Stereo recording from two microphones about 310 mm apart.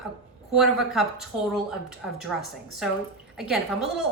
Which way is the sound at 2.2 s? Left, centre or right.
Centre.